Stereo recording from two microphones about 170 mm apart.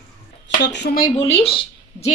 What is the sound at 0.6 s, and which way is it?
Speech, 85° left.